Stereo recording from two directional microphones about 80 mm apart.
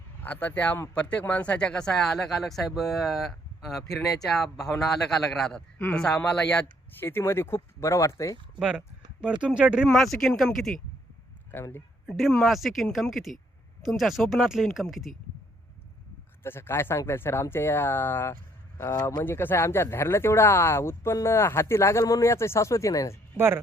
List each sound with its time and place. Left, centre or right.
0.2 s speech: left
7.1 s speech: left
8.5 s speech: centre
9.9 s speech: centre
11.5 s speech: left
12.0 s speech: centre
16.4 s speech: left